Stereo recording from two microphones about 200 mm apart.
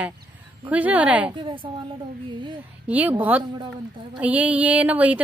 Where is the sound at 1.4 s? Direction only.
25° right (ahead or behind).